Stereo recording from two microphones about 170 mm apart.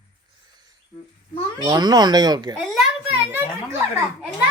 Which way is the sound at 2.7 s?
5° right (ahead or behind).